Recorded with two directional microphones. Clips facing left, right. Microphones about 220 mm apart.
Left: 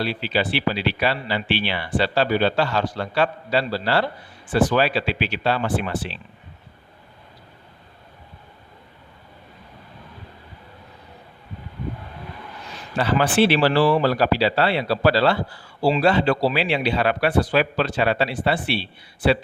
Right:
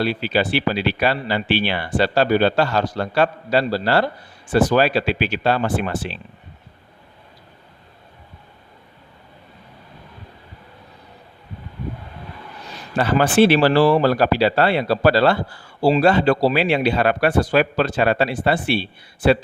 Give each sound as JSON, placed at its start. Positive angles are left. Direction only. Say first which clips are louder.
{"t": 0.0, "sound": "speech", "louder": "right 3 dB", "side_deg": -45}
{"t": 13.0, "sound": "speech", "louder": "right 3 dB", "side_deg": -45}